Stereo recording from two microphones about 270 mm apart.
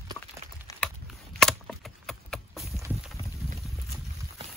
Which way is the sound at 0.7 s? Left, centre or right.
Centre.